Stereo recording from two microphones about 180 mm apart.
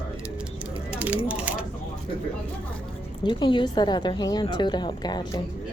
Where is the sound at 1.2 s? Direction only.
10° right (ahead or behind).